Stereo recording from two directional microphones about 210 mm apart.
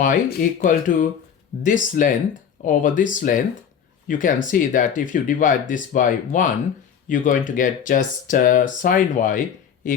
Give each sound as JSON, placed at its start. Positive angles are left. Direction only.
{"t": 0.0, "sound": "speech", "side_deg": 40}